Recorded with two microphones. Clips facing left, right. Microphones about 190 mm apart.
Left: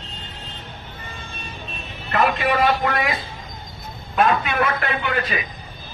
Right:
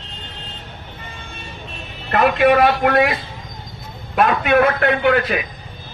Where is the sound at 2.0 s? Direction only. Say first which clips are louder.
Right 6 dB; 65° right (ahead or behind).